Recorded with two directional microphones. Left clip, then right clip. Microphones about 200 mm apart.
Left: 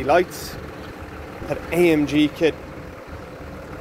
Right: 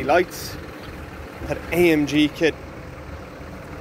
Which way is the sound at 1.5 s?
5° right (ahead or behind).